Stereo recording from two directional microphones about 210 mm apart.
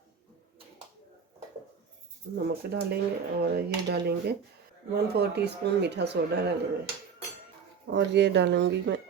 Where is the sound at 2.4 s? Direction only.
50° right (ahead or behind).